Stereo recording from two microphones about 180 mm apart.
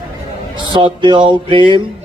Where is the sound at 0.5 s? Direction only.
25° right (ahead or behind).